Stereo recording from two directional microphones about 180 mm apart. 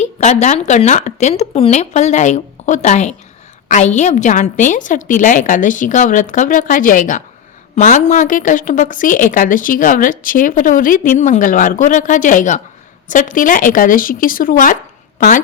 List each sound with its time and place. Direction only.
0.0 s a woman's voice: 40° left (ahead or behind)